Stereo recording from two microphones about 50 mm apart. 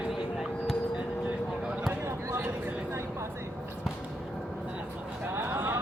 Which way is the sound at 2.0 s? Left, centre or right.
Right.